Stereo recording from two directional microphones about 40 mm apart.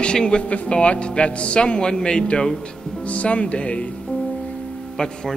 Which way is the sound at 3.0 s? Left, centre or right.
Left.